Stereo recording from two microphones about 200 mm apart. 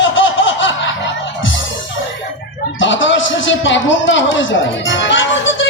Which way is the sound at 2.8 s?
70° left (ahead or behind).